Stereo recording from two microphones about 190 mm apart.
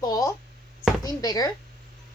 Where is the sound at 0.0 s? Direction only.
20° left (ahead or behind).